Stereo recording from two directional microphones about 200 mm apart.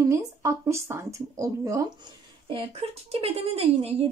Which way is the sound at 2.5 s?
30° right (ahead or behind).